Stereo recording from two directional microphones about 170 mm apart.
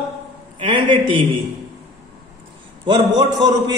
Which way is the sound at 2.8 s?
25° right (ahead or behind).